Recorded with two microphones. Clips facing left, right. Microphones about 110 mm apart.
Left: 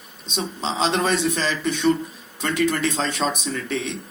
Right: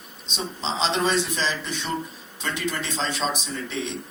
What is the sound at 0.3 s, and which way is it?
A man's voice, 50° left (ahead or behind).